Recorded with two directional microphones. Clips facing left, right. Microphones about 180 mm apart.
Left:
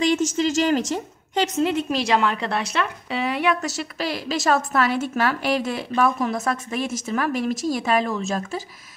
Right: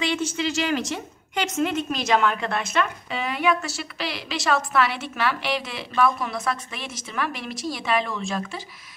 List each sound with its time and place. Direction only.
0.0 s a woman's voice: 45° left (ahead or behind)